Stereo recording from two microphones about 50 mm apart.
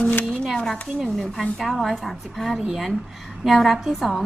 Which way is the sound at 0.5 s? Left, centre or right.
Centre.